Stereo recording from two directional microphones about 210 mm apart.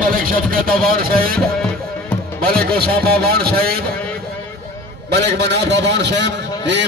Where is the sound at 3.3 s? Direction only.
50° right (ahead or behind).